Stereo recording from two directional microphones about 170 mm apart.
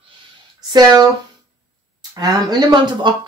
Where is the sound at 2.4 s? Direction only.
25° right (ahead or behind).